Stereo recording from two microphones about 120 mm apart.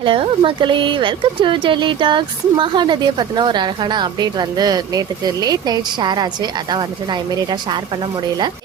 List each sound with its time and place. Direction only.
0.0 s speech: 45° right (ahead or behind)